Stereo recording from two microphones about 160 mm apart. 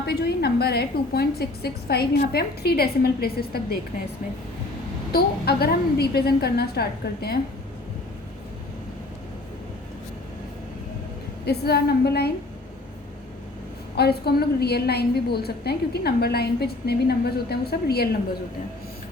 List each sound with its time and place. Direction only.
0.0 s a woman's voice: 85° left; by 3.8 s 70° left (ahead or behind)
5.1 s a woman's voice: 80° left
11.4 s a woman's voice: 90° left
13.9 s a woman's voice: 85° left